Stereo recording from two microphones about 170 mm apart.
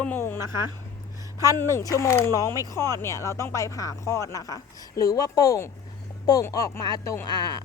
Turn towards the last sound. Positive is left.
turn(degrees=25)  # may be behind; listen again after turning